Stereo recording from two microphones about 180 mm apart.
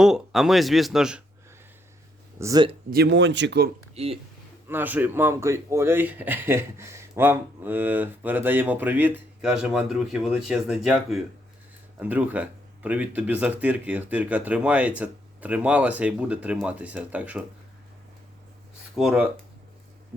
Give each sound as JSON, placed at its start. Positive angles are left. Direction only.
{"t": 0.0, "sound": "speech", "side_deg": 0}
{"t": 2.4, "sound": "speech", "side_deg": -20}
{"t": 2.9, "sound": "speech", "side_deg": -70}
{"t": 3.9, "sound": "speech", "side_deg": -35}
{"t": 4.7, "sound": "speech", "side_deg": -10}
{"t": 18.9, "sound": "speech", "side_deg": -5}